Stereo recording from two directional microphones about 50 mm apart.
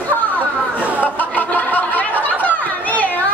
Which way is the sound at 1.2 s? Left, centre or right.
Left.